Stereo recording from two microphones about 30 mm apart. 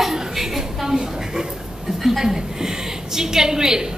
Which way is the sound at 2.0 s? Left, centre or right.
Centre.